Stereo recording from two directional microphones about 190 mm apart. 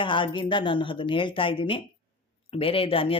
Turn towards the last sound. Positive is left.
turn(degrees=30)  # may be behind; listen again after turning